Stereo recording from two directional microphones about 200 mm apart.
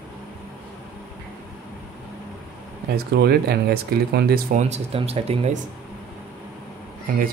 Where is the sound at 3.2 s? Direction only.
55° right (ahead or behind).